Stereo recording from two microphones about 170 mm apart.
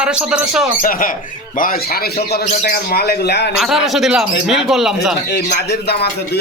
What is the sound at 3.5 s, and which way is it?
Speech, centre (ahead or behind).